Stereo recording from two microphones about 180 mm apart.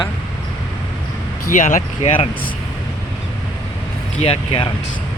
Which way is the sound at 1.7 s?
45° left (ahead or behind).